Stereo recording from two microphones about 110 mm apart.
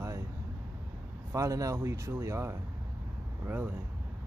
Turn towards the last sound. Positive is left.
turn(degrees=-20)  # may be behind; listen again after turning